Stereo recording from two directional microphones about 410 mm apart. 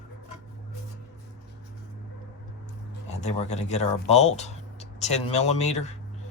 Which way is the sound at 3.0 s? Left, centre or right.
Centre.